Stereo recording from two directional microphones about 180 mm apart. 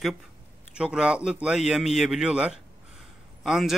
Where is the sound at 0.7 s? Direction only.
5° right (ahead or behind).